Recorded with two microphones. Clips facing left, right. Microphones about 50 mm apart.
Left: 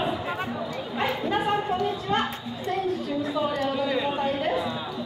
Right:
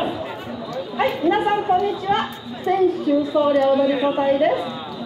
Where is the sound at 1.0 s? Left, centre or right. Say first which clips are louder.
Right 7 dB; right.